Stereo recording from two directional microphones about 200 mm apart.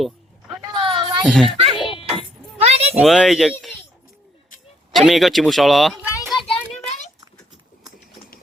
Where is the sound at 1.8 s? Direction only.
25° left (ahead or behind).